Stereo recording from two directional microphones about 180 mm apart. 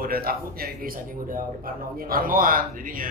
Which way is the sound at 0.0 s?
55° right (ahead or behind).